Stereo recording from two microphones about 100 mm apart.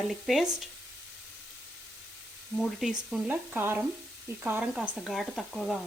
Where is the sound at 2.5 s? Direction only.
Centre (ahead or behind).